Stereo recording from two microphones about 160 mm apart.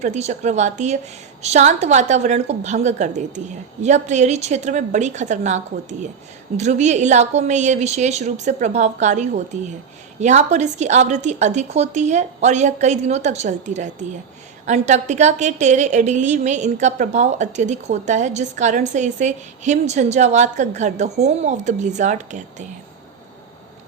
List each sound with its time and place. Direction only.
0.0 s a woman's voice: 45° right (ahead or behind)